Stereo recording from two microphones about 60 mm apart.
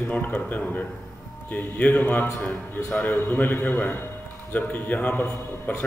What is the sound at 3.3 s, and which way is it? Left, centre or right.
Speech, left.